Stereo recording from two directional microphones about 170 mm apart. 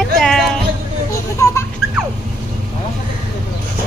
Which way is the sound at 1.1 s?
15° left (ahead or behind).